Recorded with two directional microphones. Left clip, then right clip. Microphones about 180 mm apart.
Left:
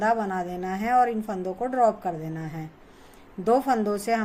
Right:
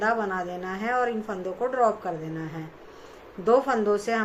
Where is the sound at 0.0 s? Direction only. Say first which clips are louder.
Left 1 dB; 55° left (ahead or behind).